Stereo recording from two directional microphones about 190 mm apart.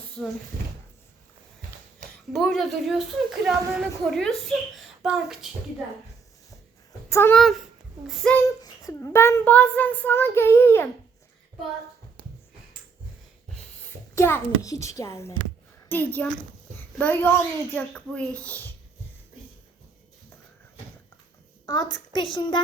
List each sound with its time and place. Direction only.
0.2 s a woman's voice: centre (ahead or behind)
2.3 s a woman's voice: centre (ahead or behind)
7.1 s speech: 15° left (ahead or behind)
7.3 s a woman's voice: centre (ahead or behind)
8.6 s a child's voice: 15° left (ahead or behind)
14.2 s a child's voice: 15° left (ahead or behind)
21.7 s a woman's voice: 20° left (ahead or behind)